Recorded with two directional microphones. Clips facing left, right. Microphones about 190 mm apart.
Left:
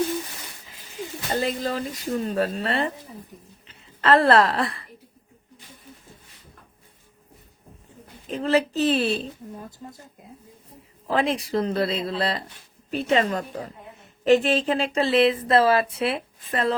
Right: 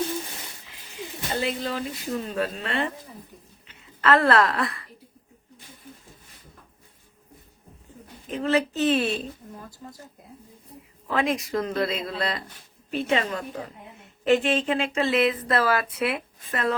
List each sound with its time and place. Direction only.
1.4 s a woman's voice: 45° left (ahead or behind)
8.3 s speech: 35° left (ahead or behind)
11.1 s speech: 30° left (ahead or behind)